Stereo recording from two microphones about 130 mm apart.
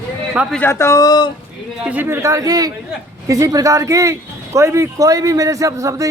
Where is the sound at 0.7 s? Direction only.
20° left (ahead or behind).